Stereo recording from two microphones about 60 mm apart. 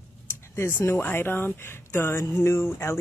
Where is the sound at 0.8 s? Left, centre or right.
Left.